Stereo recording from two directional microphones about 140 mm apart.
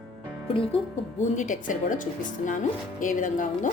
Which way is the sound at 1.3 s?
65° left (ahead or behind).